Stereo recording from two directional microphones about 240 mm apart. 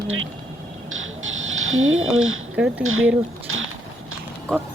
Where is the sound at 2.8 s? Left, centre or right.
Right.